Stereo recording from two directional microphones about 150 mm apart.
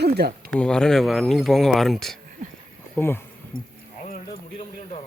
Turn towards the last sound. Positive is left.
turn(degrees=15)  # may be behind; listen again after turning